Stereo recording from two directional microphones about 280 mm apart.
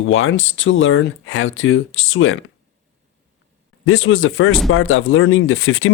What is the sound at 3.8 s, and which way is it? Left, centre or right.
Speech, left.